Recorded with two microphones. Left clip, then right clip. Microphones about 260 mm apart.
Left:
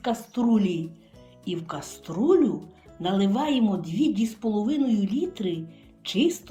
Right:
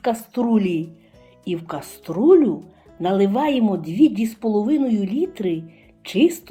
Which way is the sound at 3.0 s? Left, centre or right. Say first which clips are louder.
Right 7 dB; centre.